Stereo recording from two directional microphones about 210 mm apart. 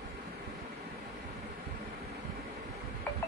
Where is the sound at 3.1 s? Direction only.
10° left (ahead or behind).